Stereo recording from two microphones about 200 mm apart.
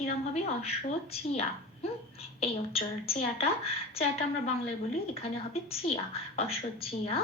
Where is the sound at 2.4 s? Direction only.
30° left (ahead or behind).